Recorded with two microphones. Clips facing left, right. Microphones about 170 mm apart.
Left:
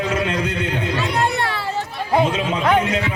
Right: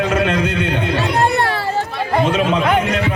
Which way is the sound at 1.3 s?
40° right (ahead or behind).